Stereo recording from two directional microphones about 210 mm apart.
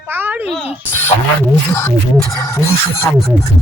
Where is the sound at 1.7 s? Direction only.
10° left (ahead or behind).